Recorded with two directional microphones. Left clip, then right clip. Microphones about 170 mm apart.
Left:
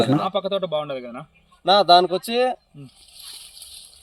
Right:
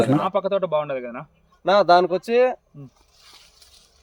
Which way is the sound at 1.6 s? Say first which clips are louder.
Left 1 dB; 20° right (ahead or behind).